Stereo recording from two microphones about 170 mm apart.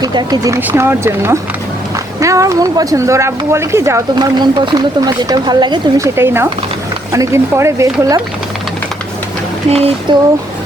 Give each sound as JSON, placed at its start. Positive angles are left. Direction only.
{"t": 0.0, "sound": "speech", "side_deg": -25}
{"t": 6.1, "sound": "speech", "side_deg": -15}
{"t": 9.6, "sound": "a sound", "side_deg": -35}